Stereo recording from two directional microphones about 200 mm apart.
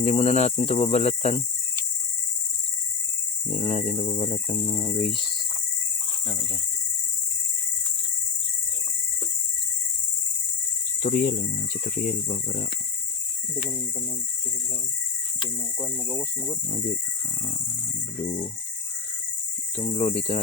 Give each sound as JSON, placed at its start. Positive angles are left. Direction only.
{"t": 0.0, "sound": "speech", "side_deg": 30}
{"t": 3.5, "sound": "speech", "side_deg": 35}
{"t": 11.0, "sound": "speech", "side_deg": 45}
{"t": 15.8, "sound": "speech", "side_deg": -15}
{"t": 19.7, "sound": "speech", "side_deg": 35}